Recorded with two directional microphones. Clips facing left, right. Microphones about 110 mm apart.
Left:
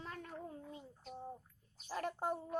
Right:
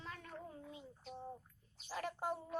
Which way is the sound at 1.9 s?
45° left (ahead or behind).